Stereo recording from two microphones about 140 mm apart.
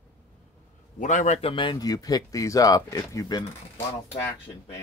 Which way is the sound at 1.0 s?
60° left (ahead or behind).